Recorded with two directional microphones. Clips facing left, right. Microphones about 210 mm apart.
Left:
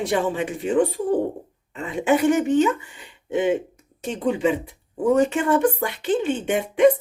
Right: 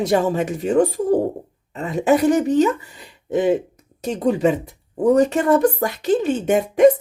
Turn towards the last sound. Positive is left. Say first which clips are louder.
# right 4 dB
turn(degrees=-40)  # may be behind; listen again after turning